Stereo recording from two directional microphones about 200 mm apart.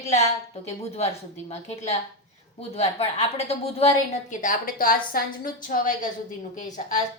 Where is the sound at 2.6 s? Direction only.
30° left (ahead or behind).